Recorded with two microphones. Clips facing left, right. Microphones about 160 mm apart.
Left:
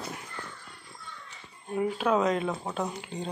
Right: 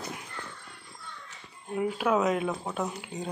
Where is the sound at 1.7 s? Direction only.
5° right (ahead or behind).